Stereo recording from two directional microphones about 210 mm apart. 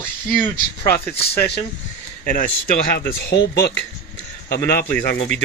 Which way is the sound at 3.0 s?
50° left (ahead or behind).